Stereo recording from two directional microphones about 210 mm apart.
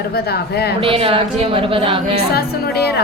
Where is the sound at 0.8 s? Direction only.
25° right (ahead or behind).